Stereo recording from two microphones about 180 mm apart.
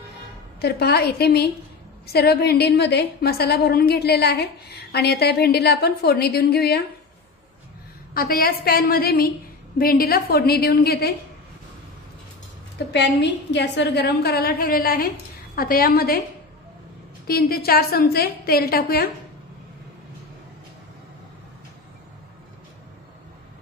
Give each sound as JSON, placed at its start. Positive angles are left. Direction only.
{"t": 0.6, "sound": "a woman's voice", "side_deg": 65}
{"t": 8.1, "sound": "a woman's voice", "side_deg": 55}
{"t": 12.7, "sound": "a woman's voice", "side_deg": 70}
{"t": 17.3, "sound": "a woman's voice", "side_deg": 60}